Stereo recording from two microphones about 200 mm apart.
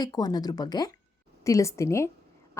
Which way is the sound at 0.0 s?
20° left (ahead or behind).